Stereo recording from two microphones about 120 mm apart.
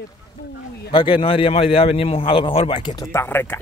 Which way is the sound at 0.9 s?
45° left (ahead or behind).